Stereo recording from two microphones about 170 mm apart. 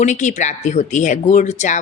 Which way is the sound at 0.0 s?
45° left (ahead or behind).